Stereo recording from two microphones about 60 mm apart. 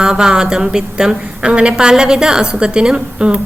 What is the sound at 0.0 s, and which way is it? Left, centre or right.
A woman's voice, centre.